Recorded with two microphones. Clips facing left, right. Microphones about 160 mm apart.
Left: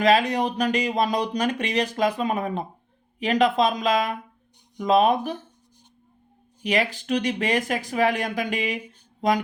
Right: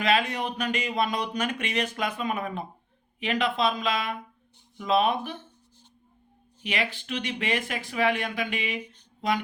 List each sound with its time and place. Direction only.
0.0 s speech: 35° left (ahead or behind)
6.6 s speech: 40° left (ahead or behind)